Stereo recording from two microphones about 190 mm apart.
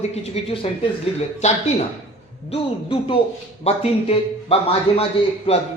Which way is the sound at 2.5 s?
30° left (ahead or behind).